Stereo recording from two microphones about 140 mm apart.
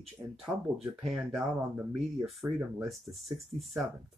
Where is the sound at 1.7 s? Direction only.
15° right (ahead or behind).